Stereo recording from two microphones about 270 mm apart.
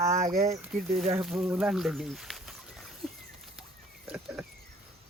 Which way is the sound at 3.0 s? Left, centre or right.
Centre.